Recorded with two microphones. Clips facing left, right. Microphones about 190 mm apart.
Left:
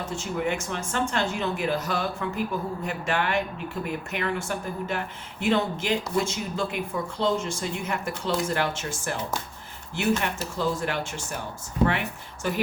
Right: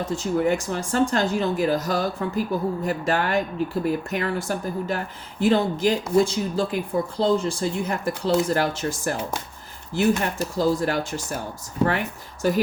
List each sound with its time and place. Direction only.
0.0 s speech: 35° right (ahead or behind)